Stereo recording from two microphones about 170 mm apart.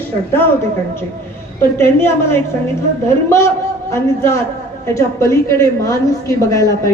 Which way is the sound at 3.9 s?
15° left (ahead or behind).